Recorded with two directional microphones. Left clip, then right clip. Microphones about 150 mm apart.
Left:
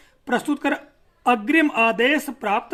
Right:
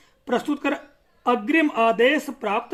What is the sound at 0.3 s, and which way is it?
Speech, 35° left (ahead or behind).